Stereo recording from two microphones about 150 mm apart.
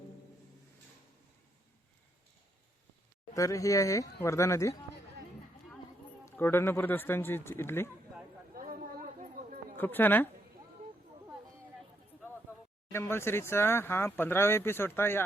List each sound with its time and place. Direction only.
3.3 s speech: 20° left (ahead or behind)
6.2 s speech: 15° left (ahead or behind)
8.5 s a sound: 70° right (ahead or behind)
9.7 s speech: 15° left (ahead or behind)
12.9 s speech: 15° left (ahead or behind)